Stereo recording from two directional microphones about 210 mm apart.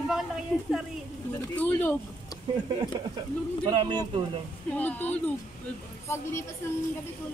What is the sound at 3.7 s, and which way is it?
Speech, 20° right (ahead or behind).